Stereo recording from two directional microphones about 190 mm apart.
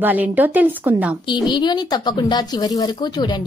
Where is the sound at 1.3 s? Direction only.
25° left (ahead or behind).